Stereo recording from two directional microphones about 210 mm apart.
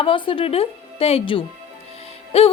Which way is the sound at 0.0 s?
25° left (ahead or behind).